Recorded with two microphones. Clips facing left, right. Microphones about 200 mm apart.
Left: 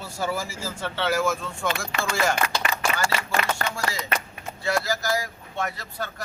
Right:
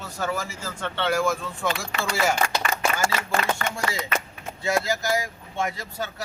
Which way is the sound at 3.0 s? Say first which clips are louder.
Right 1 dB; 50° right (ahead or behind).